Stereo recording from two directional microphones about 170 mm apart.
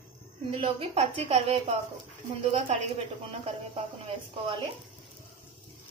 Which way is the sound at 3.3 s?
30° right (ahead or behind).